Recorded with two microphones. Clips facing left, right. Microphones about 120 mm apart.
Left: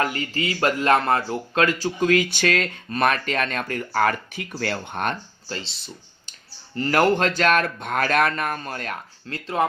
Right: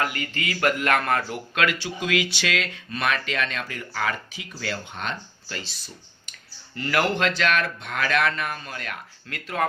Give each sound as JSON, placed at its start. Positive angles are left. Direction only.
{"t": 0.0, "sound": "speech", "side_deg": 35}
{"t": 5.5, "sound": "speech", "side_deg": 30}
{"t": 6.7, "sound": "speech", "side_deg": 40}